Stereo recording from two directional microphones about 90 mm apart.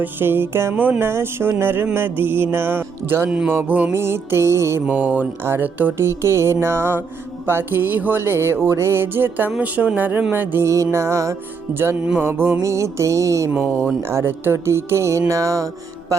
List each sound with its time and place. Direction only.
0.0 s music: 25° right (ahead or behind)
4.9 s music: 15° right (ahead or behind); by 16.1 s 40° right (ahead or behind)